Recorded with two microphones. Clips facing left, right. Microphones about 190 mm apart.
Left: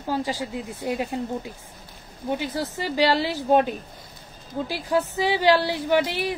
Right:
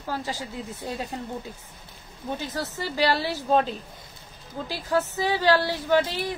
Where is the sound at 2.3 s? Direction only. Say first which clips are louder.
Left 4 dB; 15° left (ahead or behind).